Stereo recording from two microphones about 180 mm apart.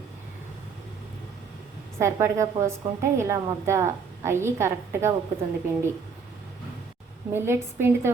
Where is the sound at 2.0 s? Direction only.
15° right (ahead or behind).